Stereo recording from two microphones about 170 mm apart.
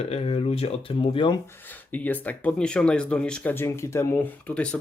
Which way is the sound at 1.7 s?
10° left (ahead or behind).